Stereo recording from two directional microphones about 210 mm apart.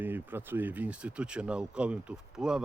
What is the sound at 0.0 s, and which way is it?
Speech, 10° right (ahead or behind).